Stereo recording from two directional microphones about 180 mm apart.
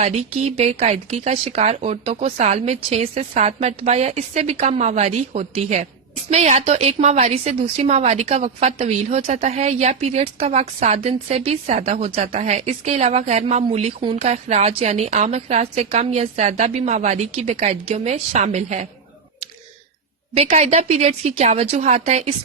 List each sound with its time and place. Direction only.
0.0 s a woman's voice: 40° right (ahead or behind)
20.3 s a woman's voice: 35° right (ahead or behind)